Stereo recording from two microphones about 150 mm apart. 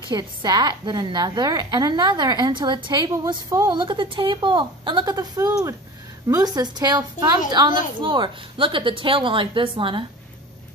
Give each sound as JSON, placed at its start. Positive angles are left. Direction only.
{"t": 0.1, "sound": "a woman's voice", "side_deg": -30}